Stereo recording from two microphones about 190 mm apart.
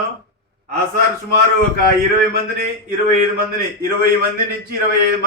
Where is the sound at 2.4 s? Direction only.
50° right (ahead or behind).